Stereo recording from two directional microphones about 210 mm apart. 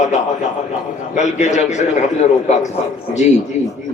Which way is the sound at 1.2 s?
35° left (ahead or behind).